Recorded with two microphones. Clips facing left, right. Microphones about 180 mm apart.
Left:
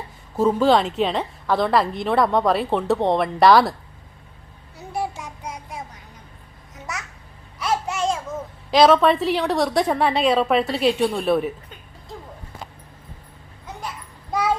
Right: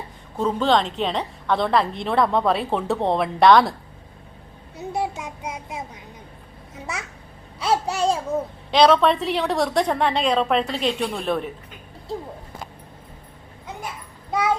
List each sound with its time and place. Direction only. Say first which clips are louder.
0.3 s a woman's voice: left 3 dB; 10° left (ahead or behind)
4.9 s child singing: right 1 dB; 20° right (ahead or behind)
6.9 s babbling: right 1 dB; 30° right (ahead or behind)
8.7 s a woman's voice: left 1 dB; centre (ahead or behind)